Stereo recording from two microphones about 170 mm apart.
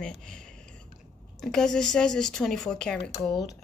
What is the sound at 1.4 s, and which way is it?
Speech, 5° left (ahead or behind).